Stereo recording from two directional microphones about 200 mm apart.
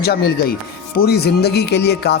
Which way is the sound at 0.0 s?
50° left (ahead or behind).